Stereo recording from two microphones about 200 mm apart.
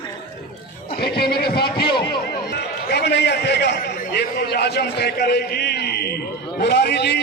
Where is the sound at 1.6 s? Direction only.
25° left (ahead or behind).